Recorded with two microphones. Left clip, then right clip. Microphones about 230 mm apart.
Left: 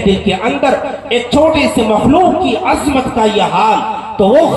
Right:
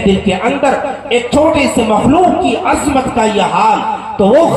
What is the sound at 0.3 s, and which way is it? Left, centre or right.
A man's voice, left.